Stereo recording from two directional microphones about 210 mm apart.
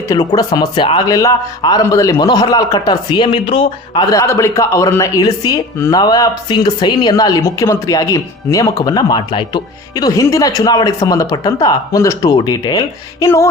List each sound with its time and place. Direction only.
0.1 s a man's voice: 20° left (ahead or behind)
4.1 s a woman's voice: 15° left (ahead or behind)